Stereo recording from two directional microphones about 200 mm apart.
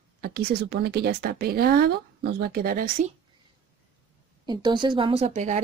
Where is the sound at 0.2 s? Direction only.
50° right (ahead or behind).